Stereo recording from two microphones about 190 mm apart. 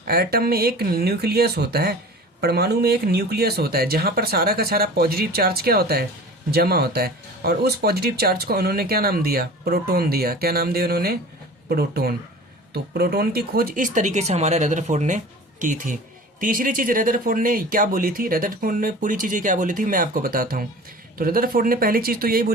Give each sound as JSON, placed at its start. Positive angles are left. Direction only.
{"t": 0.1, "sound": "speech", "side_deg": -55}